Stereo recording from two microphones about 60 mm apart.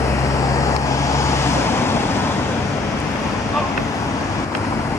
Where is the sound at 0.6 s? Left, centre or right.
Left.